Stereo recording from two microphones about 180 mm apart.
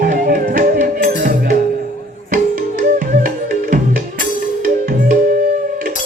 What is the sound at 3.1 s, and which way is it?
Music, 50° right (ahead or behind).